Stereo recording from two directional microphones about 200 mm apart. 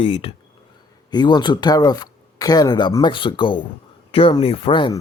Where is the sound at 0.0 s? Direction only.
30° left (ahead or behind).